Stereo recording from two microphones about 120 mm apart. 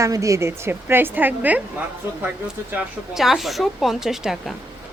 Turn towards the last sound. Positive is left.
turn(degrees=-5)  # may be behind; listen again after turning